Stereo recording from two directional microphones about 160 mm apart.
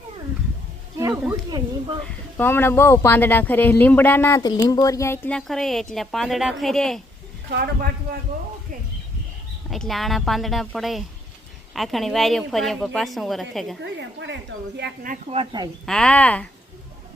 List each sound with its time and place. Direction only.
0.9 s a sound: 20° right (ahead or behind)
1.3 s speech: 25° right (ahead or behind)
2.0 s speech: 15° left (ahead or behind)
5.5 s speech: centre (ahead or behind)
7.5 s a man's voice: 70° right (ahead or behind)
9.6 s speech: centre (ahead or behind)
13.8 s a woman's voice: 90° right
15.1 s speech: 40° right (ahead or behind)
15.9 s speech: 5° left (ahead or behind)